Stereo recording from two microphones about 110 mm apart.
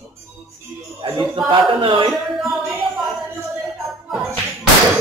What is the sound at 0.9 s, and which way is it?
Speech, 45° right (ahead or behind).